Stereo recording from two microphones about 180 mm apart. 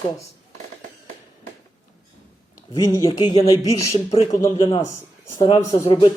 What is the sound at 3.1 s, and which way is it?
A man's voice, 25° left (ahead or behind).